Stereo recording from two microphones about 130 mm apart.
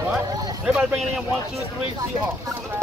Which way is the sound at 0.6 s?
10° right (ahead or behind).